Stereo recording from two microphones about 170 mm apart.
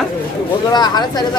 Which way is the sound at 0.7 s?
25° left (ahead or behind).